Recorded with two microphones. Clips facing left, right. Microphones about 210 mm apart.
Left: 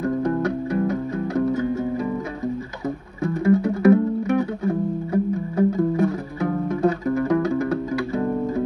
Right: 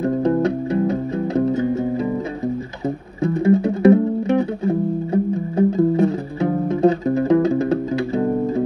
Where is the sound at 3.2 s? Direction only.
25° right (ahead or behind).